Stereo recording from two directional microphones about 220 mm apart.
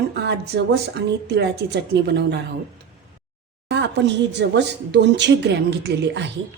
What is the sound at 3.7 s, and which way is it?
Speech, 50° right (ahead or behind).